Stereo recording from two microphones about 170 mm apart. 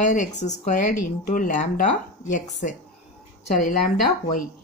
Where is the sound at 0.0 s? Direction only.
45° left (ahead or behind).